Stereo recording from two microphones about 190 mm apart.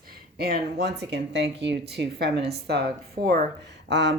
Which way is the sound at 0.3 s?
55° right (ahead or behind).